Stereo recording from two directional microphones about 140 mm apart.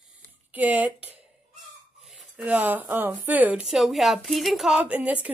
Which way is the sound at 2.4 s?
10° right (ahead or behind).